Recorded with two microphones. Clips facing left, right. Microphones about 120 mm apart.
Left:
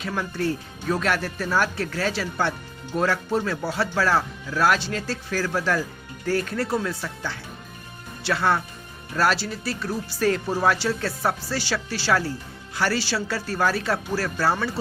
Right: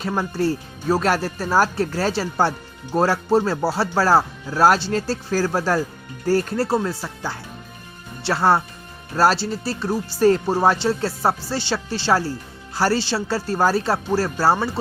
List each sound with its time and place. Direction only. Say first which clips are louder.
0.1 s speech: right 4 dB; 30° right (ahead or behind)